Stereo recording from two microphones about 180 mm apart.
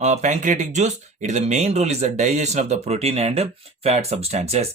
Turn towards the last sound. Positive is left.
turn(degrees=-35)  # may be behind; listen again after turning